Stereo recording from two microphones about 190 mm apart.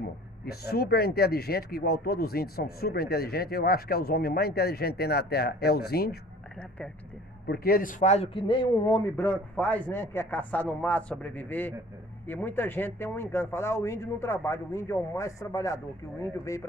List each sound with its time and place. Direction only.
0.5 s speech: 55° left (ahead or behind)
7.4 s speech: 55° left (ahead or behind); by 16.6 s 15° left (ahead or behind)